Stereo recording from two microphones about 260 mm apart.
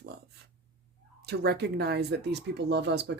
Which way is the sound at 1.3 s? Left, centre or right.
Right.